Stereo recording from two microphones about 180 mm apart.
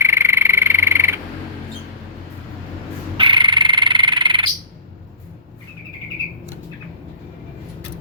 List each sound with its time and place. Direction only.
0.0 s frog: 15° right (ahead or behind)
3.2 s frog: 25° right (ahead or behind)